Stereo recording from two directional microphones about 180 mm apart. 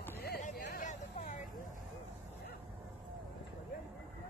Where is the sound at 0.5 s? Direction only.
65° left (ahead or behind).